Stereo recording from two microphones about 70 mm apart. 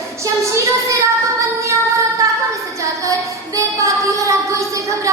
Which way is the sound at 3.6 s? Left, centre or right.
Right.